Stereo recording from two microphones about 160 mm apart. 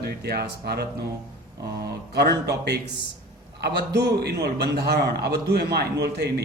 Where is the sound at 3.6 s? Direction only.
90° right.